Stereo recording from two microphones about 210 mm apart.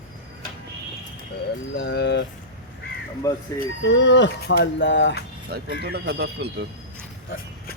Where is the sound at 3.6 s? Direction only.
55° left (ahead or behind).